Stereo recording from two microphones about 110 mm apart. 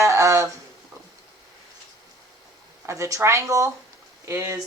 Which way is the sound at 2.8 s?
25° right (ahead or behind).